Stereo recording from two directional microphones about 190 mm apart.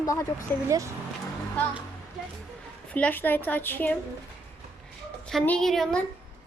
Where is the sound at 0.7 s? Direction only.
15° right (ahead or behind).